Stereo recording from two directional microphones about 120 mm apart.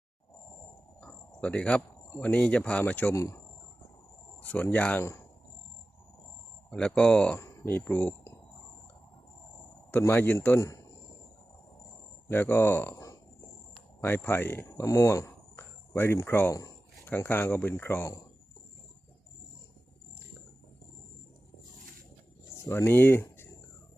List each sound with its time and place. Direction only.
1.0 s speech: 10° left (ahead or behind)
3.2 s speech: 25° left (ahead or behind)
4.4 s speech: 15° left (ahead or behind)
6.7 s speech: 5° left (ahead or behind)
7.3 s speech: 20° left (ahead or behind)
9.9 s speech: 20° left (ahead or behind)
12.3 s speech: 15° left (ahead or behind)
22.5 s speech: 20° left (ahead or behind)